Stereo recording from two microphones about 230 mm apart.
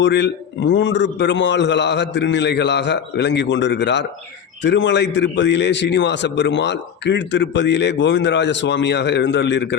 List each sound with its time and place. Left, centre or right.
0.0 s a man's voice: left